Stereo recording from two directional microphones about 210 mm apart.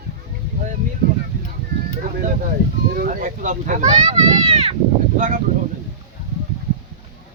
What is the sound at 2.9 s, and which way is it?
Speech, 40° right (ahead or behind).